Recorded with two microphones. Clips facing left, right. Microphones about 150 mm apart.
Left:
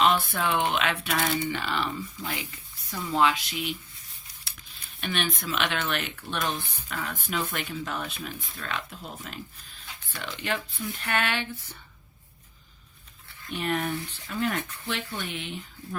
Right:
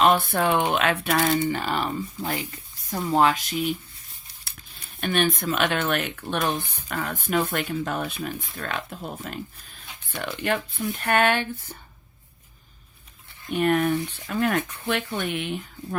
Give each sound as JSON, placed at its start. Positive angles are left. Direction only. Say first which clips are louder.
{"t": 0.0, "sound": "speech", "louder": "right 4 dB", "side_deg": -50}
{"t": 4.9, "sound": "speech", "louder": "right 7 dB", "side_deg": -50}
{"t": 13.5, "sound": "speech", "louder": "right 8 dB", "side_deg": -55}